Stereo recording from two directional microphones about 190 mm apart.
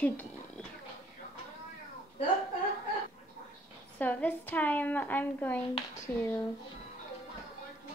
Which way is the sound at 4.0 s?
10° left (ahead or behind).